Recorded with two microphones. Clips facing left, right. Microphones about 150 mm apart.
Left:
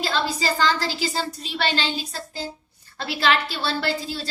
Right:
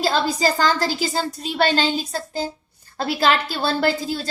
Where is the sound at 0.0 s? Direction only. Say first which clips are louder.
Right 5 dB; 45° right (ahead or behind).